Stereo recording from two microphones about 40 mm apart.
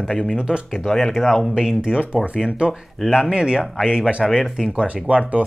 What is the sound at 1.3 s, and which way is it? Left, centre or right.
Speech, centre.